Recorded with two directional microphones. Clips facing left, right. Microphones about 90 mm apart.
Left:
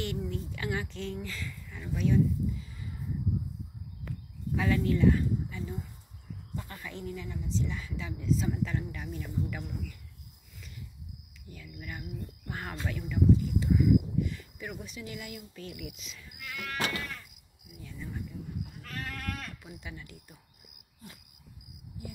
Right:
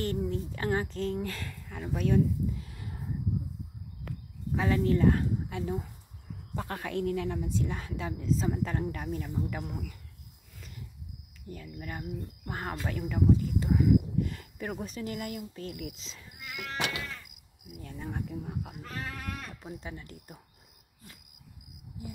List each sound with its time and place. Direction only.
0.3 s speech: 35° right (ahead or behind); by 3.0 s 65° right (ahead or behind)
4.6 s speech: 30° right (ahead or behind)
5.5 s a woman's voice: 60° right (ahead or behind); by 9.9 s 40° right (ahead or behind)
11.4 s speech: 40° right (ahead or behind); by 17.0 s 20° right (ahead or behind)
17.7 s cricket: 50° right (ahead or behind); by 18.8 s 80° right
19.1 s sheep: 15° right (ahead or behind)
19.6 s speech: 35° right (ahead or behind)